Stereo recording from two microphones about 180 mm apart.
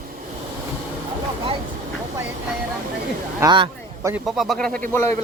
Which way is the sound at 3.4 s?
25° right (ahead or behind).